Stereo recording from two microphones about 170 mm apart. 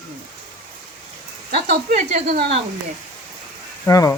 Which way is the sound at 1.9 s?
45° right (ahead or behind).